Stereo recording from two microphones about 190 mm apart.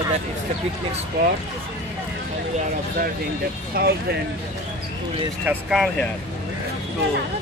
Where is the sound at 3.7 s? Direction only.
50° right (ahead or behind).